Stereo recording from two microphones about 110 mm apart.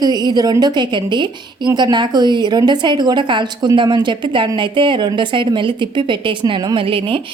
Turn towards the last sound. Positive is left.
turn(degrees=-55)  # may be behind; listen again after turning